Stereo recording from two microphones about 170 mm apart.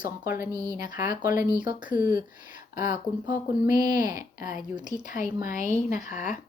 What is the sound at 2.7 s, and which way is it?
Speech, 50° left (ahead or behind).